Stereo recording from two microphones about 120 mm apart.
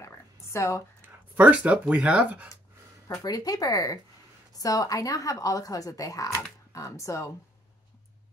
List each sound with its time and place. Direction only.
0.0 s a sound: 25° left (ahead or behind)
1.0 s speech: 15° right (ahead or behind)
3.1 s speech: 30° left (ahead or behind)